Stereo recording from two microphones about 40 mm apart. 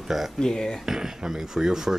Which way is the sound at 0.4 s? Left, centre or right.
Centre.